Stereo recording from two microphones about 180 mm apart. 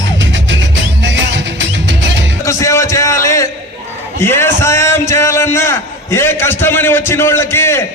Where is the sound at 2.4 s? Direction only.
15° left (ahead or behind).